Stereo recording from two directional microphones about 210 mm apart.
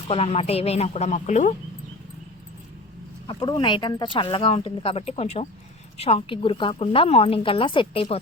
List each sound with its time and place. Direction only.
0.1 s speech: 30° left (ahead or behind)
3.2 s speech: 20° left (ahead or behind)